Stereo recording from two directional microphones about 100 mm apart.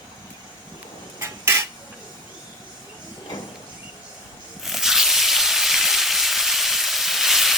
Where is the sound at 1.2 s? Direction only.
25° right (ahead or behind).